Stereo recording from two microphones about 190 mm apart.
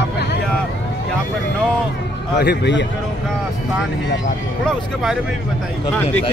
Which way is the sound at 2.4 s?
60° left (ahead or behind).